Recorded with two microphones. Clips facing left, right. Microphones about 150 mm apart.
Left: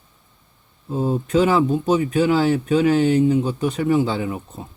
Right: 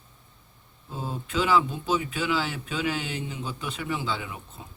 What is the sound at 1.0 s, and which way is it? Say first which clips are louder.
Speech: left 11 dB; 45° left (ahead or behind).